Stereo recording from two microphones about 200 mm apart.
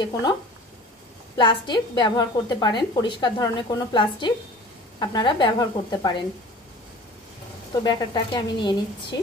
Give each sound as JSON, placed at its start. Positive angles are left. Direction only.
{"t": 0.0, "sound": "a woman's voice", "side_deg": 20}
{"t": 7.7, "sound": "a woman's voice", "side_deg": 20}